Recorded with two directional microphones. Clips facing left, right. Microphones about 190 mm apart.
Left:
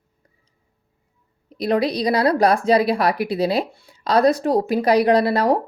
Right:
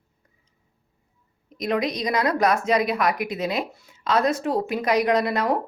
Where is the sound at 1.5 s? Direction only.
35° left (ahead or behind).